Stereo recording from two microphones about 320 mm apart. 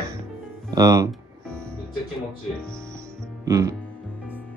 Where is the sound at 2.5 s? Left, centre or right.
Centre.